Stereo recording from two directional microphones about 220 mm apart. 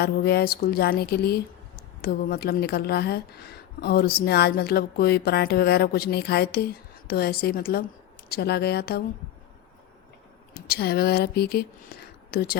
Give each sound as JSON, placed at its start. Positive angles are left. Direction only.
{"t": 0.0, "sound": "speech", "side_deg": 45}
{"t": 10.5, "sound": "speech", "side_deg": 45}